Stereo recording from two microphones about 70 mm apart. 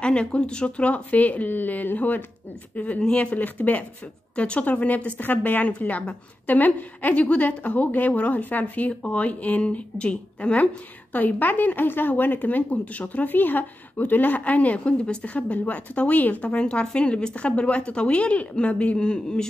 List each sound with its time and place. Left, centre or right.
0.0 s speech: centre